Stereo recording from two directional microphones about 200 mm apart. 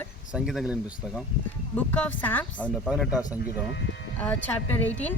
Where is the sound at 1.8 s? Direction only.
5° left (ahead or behind).